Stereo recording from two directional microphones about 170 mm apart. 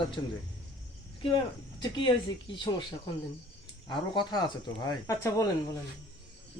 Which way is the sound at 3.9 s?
25° left (ahead or behind).